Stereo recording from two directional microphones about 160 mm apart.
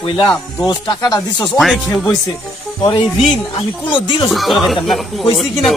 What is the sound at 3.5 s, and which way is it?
Speech, 30° left (ahead or behind).